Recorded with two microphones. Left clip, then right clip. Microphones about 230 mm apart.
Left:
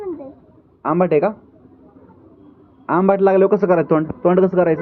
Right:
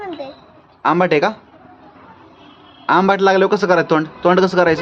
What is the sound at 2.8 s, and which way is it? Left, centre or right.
A man's voice, centre.